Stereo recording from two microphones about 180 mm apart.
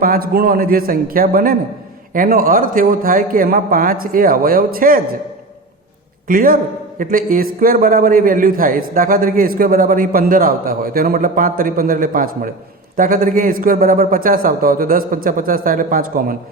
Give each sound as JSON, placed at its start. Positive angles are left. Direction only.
{"t": 0.0, "sound": "a man's voice", "side_deg": -55}
{"t": 6.2, "sound": "a man's voice", "side_deg": -50}